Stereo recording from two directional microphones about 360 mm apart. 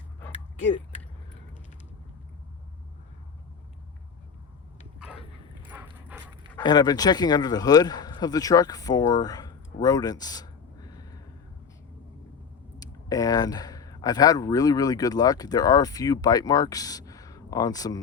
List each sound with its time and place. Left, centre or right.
0.3 s a sound: centre
5.6 s dog: centre
6.6 s speech: centre
12.8 s speech: centre